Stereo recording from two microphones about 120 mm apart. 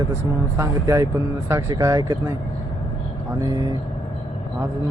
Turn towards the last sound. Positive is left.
turn(degrees=-35)  # may be behind; listen again after turning